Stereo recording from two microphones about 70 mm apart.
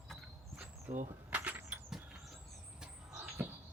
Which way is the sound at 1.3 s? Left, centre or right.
Right.